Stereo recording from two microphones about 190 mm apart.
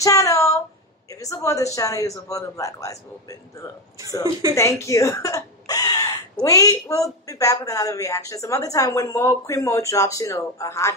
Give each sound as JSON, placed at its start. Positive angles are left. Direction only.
{"t": 0.0, "sound": "a sound", "side_deg": 15}
{"t": 1.1, "sound": "a woman's voice", "side_deg": 15}
{"t": 4.2, "sound": "speech", "side_deg": -15}
{"t": 4.6, "sound": "a woman's voice", "side_deg": 15}